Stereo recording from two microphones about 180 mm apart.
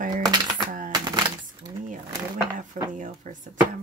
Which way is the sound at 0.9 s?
20° right (ahead or behind).